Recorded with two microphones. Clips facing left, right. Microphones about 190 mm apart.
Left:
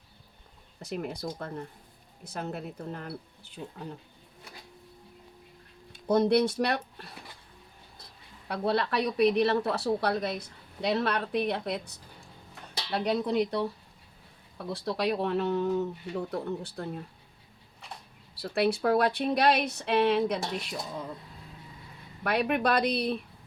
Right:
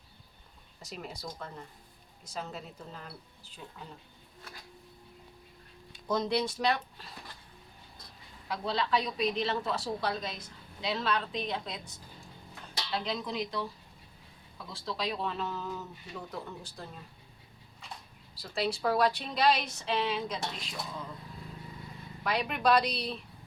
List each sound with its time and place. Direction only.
0.8 s a woman's voice: 55° left (ahead or behind)
6.1 s a woman's voice: 60° left (ahead or behind)
8.4 s a woman's voice: 60° left (ahead or behind)
12.9 s a woman's voice: 60° left (ahead or behind)
18.3 s a woman's voice: 60° left (ahead or behind)
22.2 s a woman's voice: 55° left (ahead or behind)